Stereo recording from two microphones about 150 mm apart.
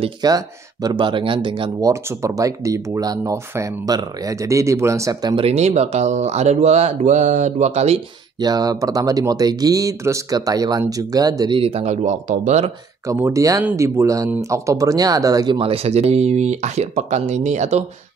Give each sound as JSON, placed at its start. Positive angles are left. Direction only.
{"t": 0.2, "sound": "speech", "side_deg": -25}
{"t": 1.8, "sound": "speech", "side_deg": -20}
{"t": 5.3, "sound": "speech", "side_deg": -40}
{"t": 8.4, "sound": "speech", "side_deg": -25}
{"t": 11.6, "sound": "speech", "side_deg": -45}
{"t": 13.0, "sound": "speech", "side_deg": -20}
{"t": 15.6, "sound": "speech", "side_deg": -40}